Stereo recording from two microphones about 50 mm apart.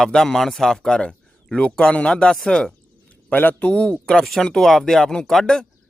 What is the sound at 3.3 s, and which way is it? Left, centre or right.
Speech, left.